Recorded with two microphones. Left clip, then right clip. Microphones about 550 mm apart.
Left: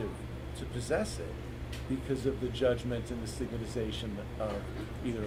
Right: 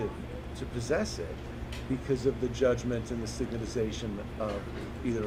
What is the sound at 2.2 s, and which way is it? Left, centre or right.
Speech, centre.